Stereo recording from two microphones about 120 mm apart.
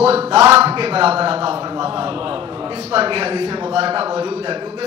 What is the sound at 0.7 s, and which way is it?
A man's voice, 50° right (ahead or behind).